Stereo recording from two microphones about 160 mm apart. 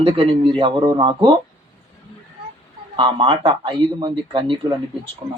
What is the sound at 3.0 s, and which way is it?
Speech, 30° right (ahead or behind).